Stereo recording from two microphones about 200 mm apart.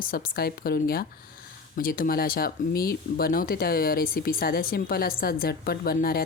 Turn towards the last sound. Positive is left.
turn(degrees=45)  # may be behind; listen again after turning